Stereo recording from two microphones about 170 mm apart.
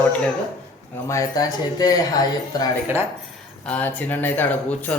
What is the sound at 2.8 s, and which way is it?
Speech, 15° right (ahead or behind).